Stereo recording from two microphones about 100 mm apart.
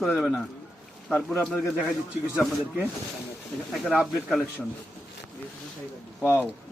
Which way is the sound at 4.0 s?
Centre (ahead or behind).